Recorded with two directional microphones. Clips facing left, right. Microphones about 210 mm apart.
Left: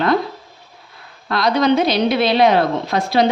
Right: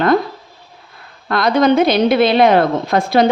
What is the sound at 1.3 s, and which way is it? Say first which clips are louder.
A woman's voice: right 3 dB; 50° right (ahead or behind).